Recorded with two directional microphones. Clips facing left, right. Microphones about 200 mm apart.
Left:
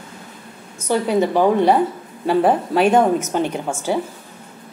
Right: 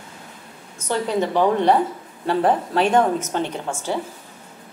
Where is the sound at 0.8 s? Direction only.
10° left (ahead or behind).